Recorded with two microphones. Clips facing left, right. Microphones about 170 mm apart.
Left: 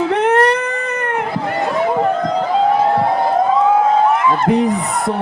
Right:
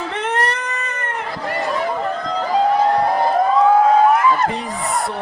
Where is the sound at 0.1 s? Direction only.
70° left (ahead or behind).